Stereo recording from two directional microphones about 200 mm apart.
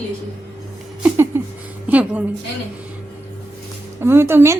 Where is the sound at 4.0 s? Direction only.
10° right (ahead or behind).